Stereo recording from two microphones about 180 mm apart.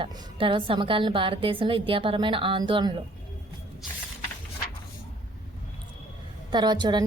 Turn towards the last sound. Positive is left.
turn(degrees=-25)  # may be behind; listen again after turning